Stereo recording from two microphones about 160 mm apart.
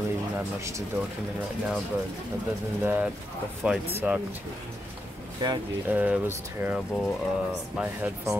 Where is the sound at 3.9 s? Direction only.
15° right (ahead or behind).